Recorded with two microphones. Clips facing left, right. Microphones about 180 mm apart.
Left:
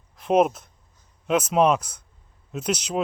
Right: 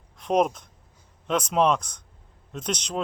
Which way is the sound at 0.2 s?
5° left (ahead or behind).